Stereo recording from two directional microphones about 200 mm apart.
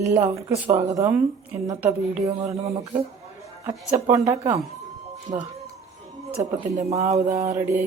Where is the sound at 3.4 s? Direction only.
15° right (ahead or behind).